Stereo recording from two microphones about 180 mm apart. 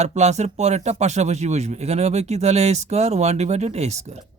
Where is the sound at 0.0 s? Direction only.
40° right (ahead or behind).